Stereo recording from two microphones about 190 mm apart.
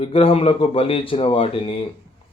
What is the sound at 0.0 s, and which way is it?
A man's voice, 30° left (ahead or behind).